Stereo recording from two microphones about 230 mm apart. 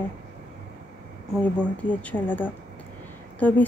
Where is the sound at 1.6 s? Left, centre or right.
Centre.